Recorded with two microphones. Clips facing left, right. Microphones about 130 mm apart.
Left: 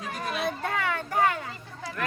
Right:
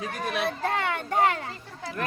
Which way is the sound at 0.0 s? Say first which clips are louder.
Right 2 dB; 65° right (ahead or behind).